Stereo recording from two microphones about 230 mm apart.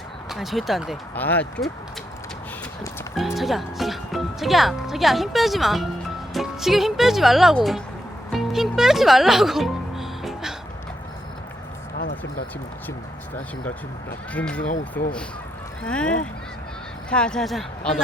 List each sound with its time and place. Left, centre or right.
0.3 s speech: centre
3.2 s speech: centre
8.3 s music: centre
11.9 s a sound: left
14.3 s speech: centre
14.6 s speech: left
15.8 s speech: centre